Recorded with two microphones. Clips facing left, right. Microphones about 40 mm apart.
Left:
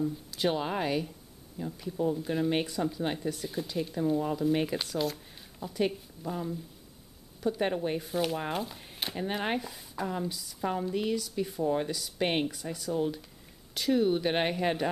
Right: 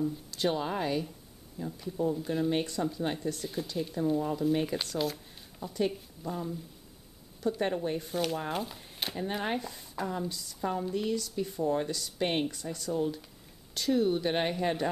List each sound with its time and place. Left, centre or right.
0.0 s speech: centre
8.0 s speech: centre
9.1 s speech: centre
9.6 s speech: centre